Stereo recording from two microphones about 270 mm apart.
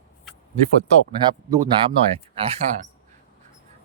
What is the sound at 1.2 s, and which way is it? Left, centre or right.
Speech, centre.